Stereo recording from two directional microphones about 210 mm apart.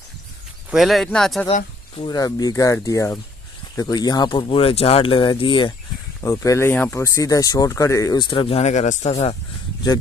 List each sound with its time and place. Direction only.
0.7 s speech: centre (ahead or behind)
2.0 s speech: 20° left (ahead or behind)